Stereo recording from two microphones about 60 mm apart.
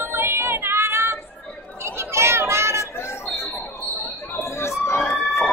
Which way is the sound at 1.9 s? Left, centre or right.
Right.